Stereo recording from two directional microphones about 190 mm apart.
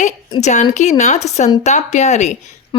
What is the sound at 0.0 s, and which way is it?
A woman's voice, 35° left (ahead or behind).